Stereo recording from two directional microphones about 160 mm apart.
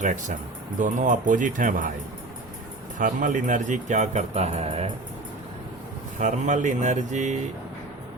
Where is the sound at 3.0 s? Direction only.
55° right (ahead or behind).